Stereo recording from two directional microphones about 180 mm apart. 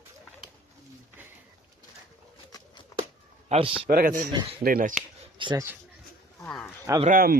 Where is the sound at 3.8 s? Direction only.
50° right (ahead or behind).